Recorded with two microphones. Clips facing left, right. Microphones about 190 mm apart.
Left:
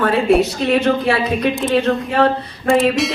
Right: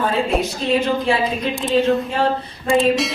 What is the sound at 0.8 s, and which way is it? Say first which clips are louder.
A woman's voice: left 2 dB; 70° left (ahead or behind).